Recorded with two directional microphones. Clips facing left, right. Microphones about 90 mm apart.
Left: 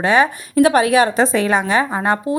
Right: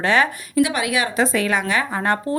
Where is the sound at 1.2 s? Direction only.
25° left (ahead or behind).